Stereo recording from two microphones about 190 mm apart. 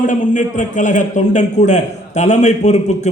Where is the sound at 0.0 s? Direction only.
40° left (ahead or behind).